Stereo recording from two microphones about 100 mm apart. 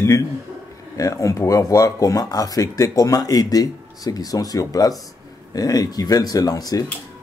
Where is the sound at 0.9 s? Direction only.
35° left (ahead or behind).